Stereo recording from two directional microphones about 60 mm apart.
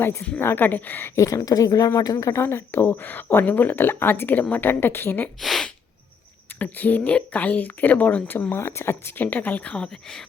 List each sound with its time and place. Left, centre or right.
0.0 s speech: left
1.1 s speech: left
2.1 s speech: left
5.4 s speech: centre
6.6 s speech: left